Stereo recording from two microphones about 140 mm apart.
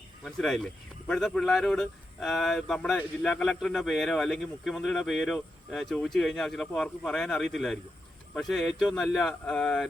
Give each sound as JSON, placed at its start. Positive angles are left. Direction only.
{"t": 0.3, "sound": "speech", "side_deg": 5}